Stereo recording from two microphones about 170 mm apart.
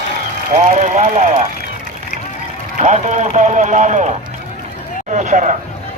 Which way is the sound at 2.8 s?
45° right (ahead or behind).